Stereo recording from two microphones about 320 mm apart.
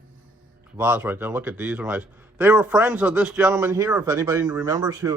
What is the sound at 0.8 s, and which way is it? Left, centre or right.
Speech, centre.